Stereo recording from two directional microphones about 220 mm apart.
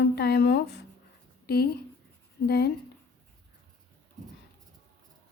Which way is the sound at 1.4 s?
45° left (ahead or behind).